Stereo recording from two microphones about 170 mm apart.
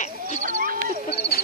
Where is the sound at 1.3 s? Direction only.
65° left (ahead or behind).